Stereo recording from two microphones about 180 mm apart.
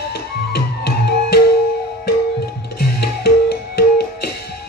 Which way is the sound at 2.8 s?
60° left (ahead or behind).